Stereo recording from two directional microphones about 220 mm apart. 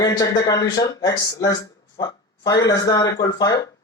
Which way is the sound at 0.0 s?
15° left (ahead or behind).